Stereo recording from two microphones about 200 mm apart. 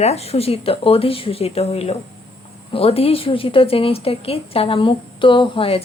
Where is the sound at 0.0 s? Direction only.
30° left (ahead or behind).